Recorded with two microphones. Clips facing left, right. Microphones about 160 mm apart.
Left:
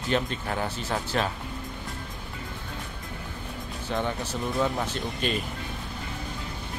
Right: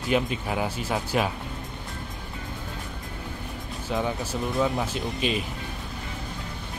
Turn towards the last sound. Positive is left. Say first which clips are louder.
# right 2 dB
turn(degrees=0)  # may be behind; listen again after turning